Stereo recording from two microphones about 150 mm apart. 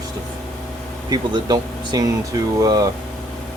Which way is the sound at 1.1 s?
25° right (ahead or behind).